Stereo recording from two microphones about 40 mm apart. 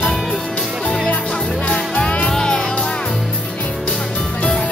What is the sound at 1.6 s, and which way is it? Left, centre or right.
Music, left.